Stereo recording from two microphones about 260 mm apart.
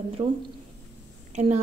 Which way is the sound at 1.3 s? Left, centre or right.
Right.